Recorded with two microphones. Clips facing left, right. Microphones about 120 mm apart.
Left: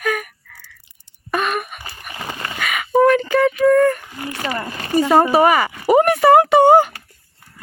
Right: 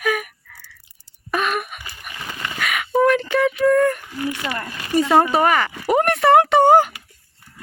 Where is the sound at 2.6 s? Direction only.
Centre (ahead or behind).